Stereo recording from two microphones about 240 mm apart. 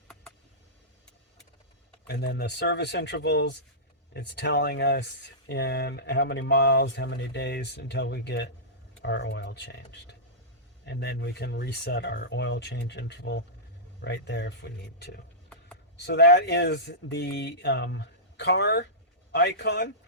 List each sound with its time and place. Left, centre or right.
2.0 s speech: left